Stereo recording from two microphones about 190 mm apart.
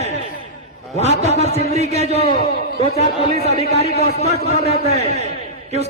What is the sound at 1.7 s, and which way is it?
Speech, 35° right (ahead or behind).